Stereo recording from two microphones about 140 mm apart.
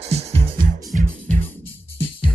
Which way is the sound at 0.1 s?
50° right (ahead or behind).